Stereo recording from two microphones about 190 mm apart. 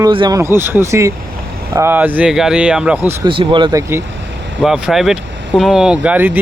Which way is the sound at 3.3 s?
25° right (ahead or behind).